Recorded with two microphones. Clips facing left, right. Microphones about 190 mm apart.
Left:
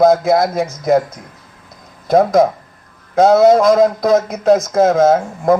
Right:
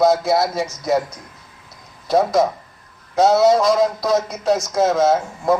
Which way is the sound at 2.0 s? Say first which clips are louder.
Left 5 dB; 55° left (ahead or behind).